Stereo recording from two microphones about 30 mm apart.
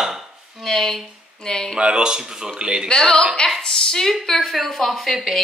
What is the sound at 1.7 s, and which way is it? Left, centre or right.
Speech, right.